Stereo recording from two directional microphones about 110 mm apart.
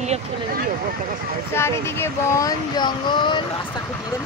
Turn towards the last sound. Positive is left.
turn(degrees=45)  # may be behind; listen again after turning